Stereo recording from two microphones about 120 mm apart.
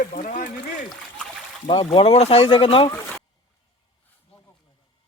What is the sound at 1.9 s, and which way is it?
Speech, 55° left (ahead or behind).